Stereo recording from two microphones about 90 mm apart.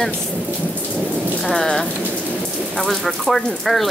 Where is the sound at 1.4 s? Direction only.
5° left (ahead or behind).